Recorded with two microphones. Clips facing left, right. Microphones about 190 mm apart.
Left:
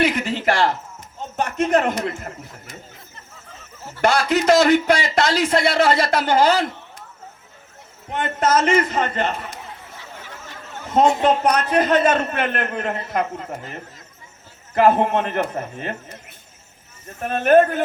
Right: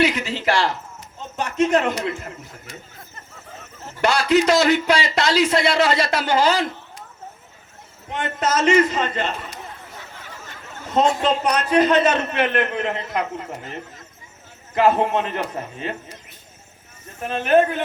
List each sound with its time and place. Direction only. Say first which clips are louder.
0.0 s a sound: left 1 dB; 50° left (ahead or behind)
1.4 s speech: even; 50° left (ahead or behind)
4.0 s speech: even; 55° left (ahead or behind)
8.1 s speech: left 3 dB; 55° left (ahead or behind)
10.9 s speech: left 2 dB; 55° left (ahead or behind)
14.8 s a man's voice: left 2 dB; 55° left (ahead or behind)
17.2 s speech: left 3 dB; 50° left (ahead or behind)